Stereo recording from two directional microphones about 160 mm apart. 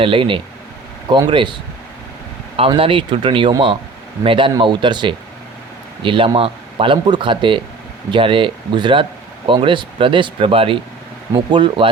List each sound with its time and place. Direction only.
0.0 s speech: 30° right (ahead or behind)
2.6 s speech: 35° right (ahead or behind)